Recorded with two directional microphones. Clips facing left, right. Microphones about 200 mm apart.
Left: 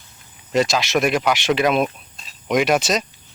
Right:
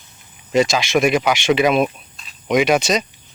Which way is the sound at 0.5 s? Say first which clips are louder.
Right 2 dB; centre (ahead or behind).